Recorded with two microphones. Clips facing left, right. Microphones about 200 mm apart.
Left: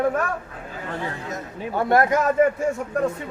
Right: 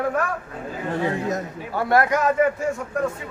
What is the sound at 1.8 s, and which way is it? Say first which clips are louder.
Speech: even; 25° left (ahead or behind).